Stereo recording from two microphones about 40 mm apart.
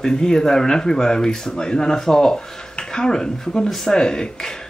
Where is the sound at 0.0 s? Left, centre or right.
Centre.